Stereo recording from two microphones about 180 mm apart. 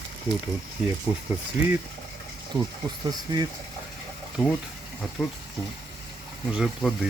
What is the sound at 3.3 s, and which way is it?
Speech, 25° right (ahead or behind).